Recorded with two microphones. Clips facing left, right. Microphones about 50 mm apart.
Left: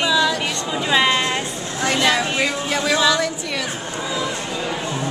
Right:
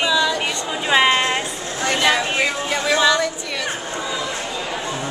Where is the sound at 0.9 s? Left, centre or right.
Centre.